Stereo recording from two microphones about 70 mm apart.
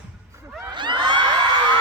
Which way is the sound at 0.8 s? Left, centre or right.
Right.